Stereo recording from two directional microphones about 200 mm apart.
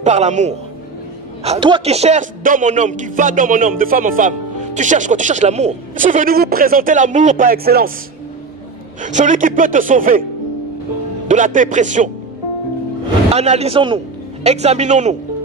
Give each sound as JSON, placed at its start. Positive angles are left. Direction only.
{"t": 0.0, "sound": "a man's voice", "side_deg": -35}
{"t": 9.0, "sound": "a man's voice", "side_deg": -40}
{"t": 11.2, "sound": "a man's voice", "side_deg": -40}
{"t": 13.3, "sound": "a man's voice", "side_deg": -30}